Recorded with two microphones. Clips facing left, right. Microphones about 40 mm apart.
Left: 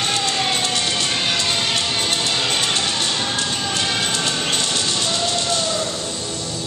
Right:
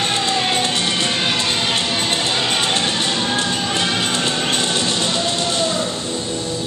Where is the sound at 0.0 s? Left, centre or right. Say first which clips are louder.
Right 2 dB; right.